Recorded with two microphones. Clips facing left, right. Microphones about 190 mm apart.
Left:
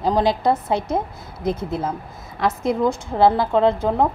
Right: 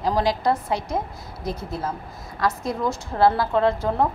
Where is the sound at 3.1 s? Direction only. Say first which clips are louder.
Left 2 dB; 20° left (ahead or behind).